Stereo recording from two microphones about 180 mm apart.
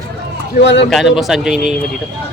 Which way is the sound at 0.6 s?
75° left (ahead or behind).